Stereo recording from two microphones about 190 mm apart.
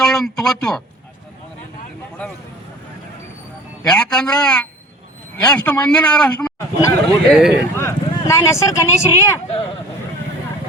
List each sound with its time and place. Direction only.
0.0 s a sound: centre (ahead or behind)
3.8 s a man's voice: 5° left (ahead or behind)
7.8 s speech: 15° left (ahead or behind)